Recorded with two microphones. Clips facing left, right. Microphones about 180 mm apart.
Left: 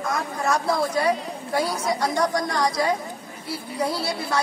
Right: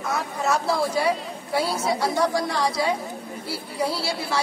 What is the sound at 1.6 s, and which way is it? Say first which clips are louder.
Speech: right 1 dB; 25° right (ahead or behind).